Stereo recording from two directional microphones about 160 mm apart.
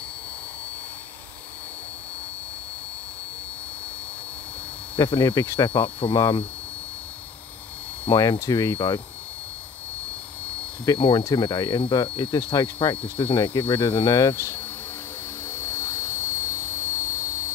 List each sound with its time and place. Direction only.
4.9 s speech: 25° left (ahead or behind)
5.7 s hum: 35° left (ahead or behind)
8.1 s speech: 25° left (ahead or behind)
10.9 s speech: 30° left (ahead or behind)
15.4 s helicopter: 15° left (ahead or behind)